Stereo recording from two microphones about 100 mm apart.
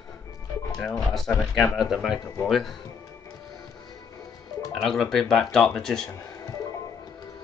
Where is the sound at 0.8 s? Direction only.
5° left (ahead or behind).